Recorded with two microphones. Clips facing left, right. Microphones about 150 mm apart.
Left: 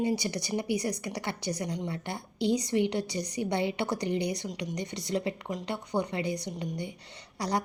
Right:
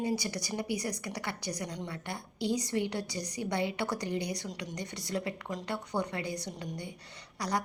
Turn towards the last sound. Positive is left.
turn(degrees=25)  # may be behind; listen again after turning